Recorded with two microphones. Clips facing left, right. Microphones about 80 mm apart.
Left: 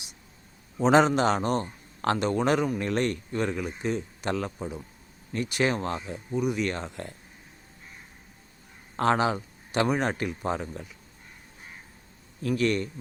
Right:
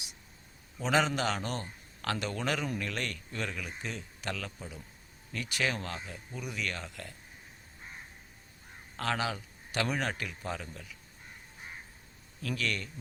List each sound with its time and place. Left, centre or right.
0.8 s a man's voice: left
9.0 s speech: left
12.4 s speech: left